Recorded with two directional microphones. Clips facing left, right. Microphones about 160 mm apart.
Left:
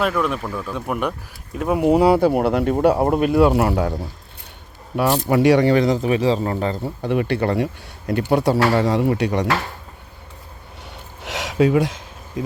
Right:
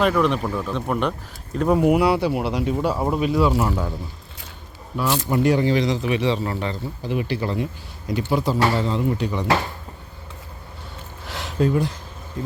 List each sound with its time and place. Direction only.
0.0 s speech: 5° left (ahead or behind)
1.8 s speech: 30° left (ahead or behind)
2.1 s speech: 50° left (ahead or behind); by 3.9 s 70° left (ahead or behind)
4.9 s speech: 90° left; by 6.7 s 45° left (ahead or behind)
6.8 s speech: 60° left (ahead or behind); by 9.5 s 75° left (ahead or behind)
11.2 s a sound: 85° left